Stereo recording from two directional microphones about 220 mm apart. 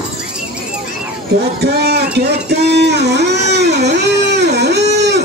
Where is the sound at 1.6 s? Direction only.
50° right (ahead or behind).